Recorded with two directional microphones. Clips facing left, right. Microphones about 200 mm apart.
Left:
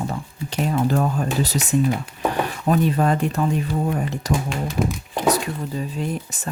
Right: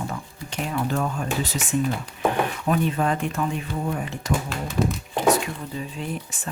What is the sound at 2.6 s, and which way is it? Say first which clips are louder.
Speech: left 5 dB; 40° left (ahead or behind).